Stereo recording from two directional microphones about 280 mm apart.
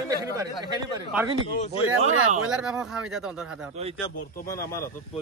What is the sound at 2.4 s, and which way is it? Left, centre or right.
Speech, centre.